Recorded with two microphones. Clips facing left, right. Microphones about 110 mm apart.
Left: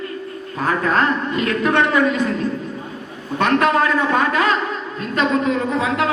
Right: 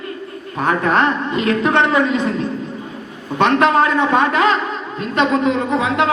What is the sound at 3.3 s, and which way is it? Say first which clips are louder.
A woman's voice: right 3 dB; 30° right (ahead or behind).